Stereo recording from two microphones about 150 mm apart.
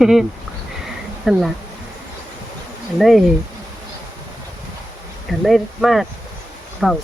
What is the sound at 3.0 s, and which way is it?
Speech, centre (ahead or behind).